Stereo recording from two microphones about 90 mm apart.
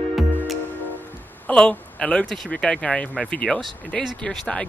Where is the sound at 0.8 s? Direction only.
20° left (ahead or behind).